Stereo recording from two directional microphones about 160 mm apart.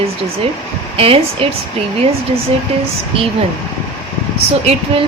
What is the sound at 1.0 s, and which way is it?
Speech, 35° right (ahead or behind).